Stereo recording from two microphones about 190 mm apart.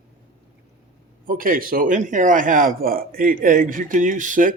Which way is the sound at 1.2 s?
45° right (ahead or behind).